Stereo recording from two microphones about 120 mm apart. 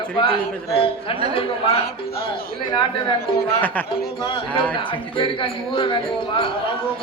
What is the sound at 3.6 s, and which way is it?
Speech, 15° left (ahead or behind).